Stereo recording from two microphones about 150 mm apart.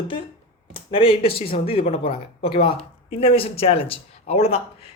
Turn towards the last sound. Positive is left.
turn(degrees=45)  # may be behind; listen again after turning